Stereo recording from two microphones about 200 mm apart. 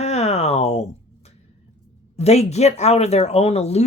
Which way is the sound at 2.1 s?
30° left (ahead or behind).